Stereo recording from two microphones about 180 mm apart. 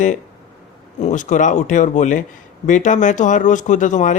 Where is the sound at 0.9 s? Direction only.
45° left (ahead or behind).